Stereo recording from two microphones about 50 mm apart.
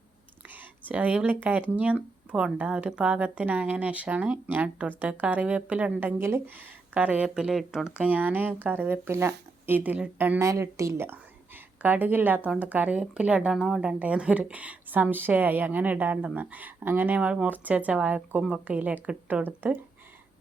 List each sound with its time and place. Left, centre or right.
0.4 s a woman's voice: right
6.1 s speech: right
6.5 s speech: right
7.3 s speech: centre
7.9 s a woman's voice: right
10.3 s a woman's voice: right
11.0 s whispering: right
11.8 s a woman's voice: right
12.9 s a woman's voice: right
17.2 s speech: right
17.5 s speech: right
18.8 s a woman's voice: right